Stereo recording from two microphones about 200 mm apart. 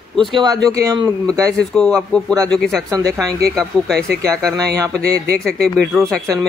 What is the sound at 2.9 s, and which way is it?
Speech, 15° right (ahead or behind).